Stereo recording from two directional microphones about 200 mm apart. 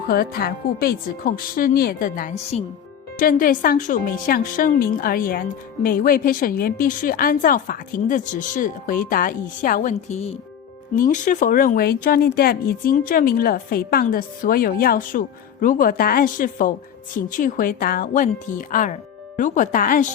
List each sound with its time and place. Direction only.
0.1 s speech: 50° left (ahead or behind); by 2.6 s 30° left (ahead or behind)
3.2 s speech: 45° left (ahead or behind)